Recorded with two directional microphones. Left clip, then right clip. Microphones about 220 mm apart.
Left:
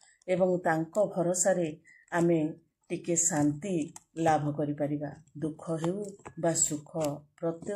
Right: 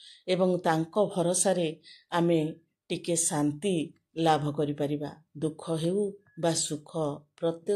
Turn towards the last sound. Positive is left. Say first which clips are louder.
# right 2 dB
turn(degrees=-50)  # may be behind; listen again after turning